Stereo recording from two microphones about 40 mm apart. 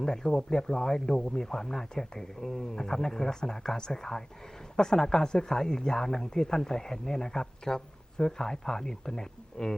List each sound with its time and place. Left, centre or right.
0.0 s speech: centre